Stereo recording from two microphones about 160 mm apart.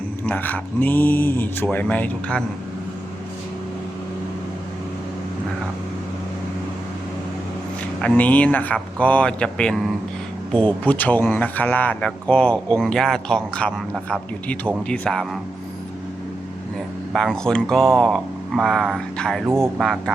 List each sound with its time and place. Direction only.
0.3 s speech: 10° left (ahead or behind)
8.0 s speech: 10° left (ahead or behind)
17.1 s speech: centre (ahead or behind)
19.5 s speech: 15° right (ahead or behind)
19.8 s speech: centre (ahead or behind)